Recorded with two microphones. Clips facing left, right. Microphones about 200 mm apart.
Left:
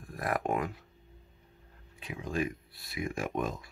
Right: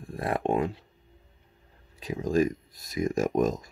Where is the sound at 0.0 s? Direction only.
30° right (ahead or behind).